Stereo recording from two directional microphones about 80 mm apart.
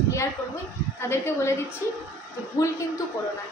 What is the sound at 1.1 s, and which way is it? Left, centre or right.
A woman's voice, left.